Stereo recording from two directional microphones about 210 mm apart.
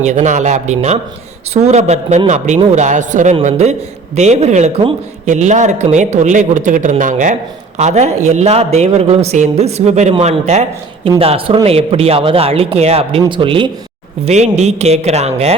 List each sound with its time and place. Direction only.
0.0 s a man's voice: 35° right (ahead or behind)